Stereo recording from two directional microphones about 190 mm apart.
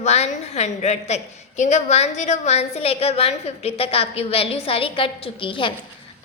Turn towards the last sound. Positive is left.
turn(degrees=25)  # may be behind; listen again after turning